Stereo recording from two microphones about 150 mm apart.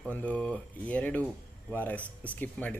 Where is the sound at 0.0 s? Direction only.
10° left (ahead or behind).